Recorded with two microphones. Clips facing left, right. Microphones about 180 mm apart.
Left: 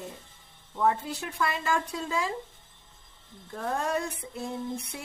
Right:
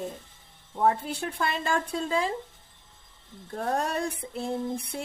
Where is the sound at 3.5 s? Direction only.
35° right (ahead or behind).